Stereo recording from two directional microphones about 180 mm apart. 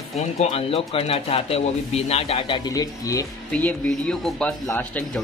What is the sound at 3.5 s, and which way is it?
Speech, 5° left (ahead or behind).